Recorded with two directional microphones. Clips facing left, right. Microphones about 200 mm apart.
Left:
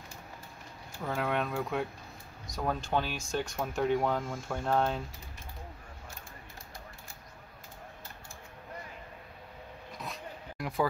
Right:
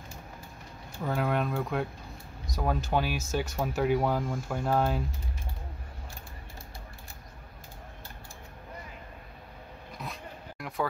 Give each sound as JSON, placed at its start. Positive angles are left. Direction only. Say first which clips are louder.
{"t": 1.0, "sound": "speech", "louder": "right 3 dB", "side_deg": 0}
{"t": 9.9, "sound": "zipper", "louder": "right 1 dB", "side_deg": 0}